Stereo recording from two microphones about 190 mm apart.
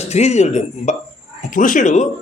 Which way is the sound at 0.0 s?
35° left (ahead or behind).